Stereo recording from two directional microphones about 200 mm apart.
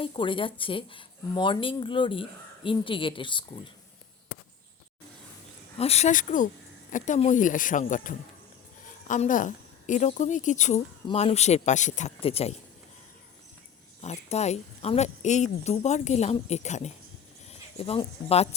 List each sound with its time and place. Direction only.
0.0 s speech: 25° left (ahead or behind)
5.7 s speech: 30° left (ahead or behind)
14.0 s speech: 35° left (ahead or behind)